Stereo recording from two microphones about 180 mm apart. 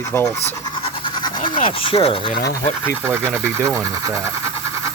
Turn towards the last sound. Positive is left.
turn(degrees=-15)  # may be behind; listen again after turning